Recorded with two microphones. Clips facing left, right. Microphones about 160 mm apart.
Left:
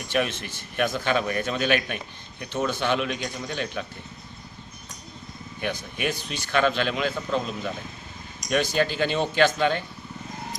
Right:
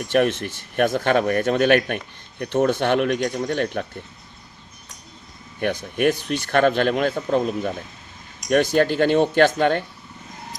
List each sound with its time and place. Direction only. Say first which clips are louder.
0.1 s speech: right 7 dB; 65° right (ahead or behind)
5.5 s speech: right 8 dB; 60° right (ahead or behind)